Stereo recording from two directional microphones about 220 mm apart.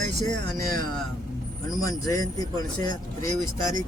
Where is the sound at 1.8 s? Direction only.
15° left (ahead or behind).